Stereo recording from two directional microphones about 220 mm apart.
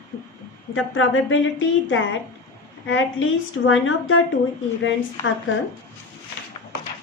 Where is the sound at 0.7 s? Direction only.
65° left (ahead or behind).